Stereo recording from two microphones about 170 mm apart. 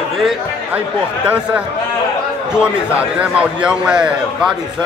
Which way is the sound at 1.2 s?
10° right (ahead or behind).